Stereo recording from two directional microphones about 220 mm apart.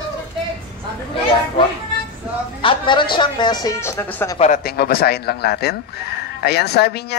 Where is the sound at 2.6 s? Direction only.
20° left (ahead or behind).